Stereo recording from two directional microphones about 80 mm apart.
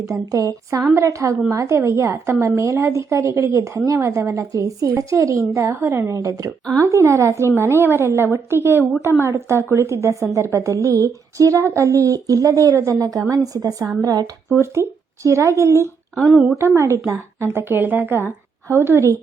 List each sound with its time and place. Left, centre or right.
0.0 s a woman's voice: right
14.5 s a woman's voice: right
16.1 s speech: centre
16.6 s a woman's voice: right